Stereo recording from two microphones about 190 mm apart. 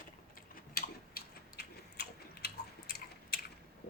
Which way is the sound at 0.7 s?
50° left (ahead or behind).